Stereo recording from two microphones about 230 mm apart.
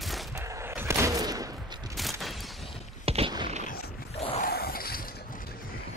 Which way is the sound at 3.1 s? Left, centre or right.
Right.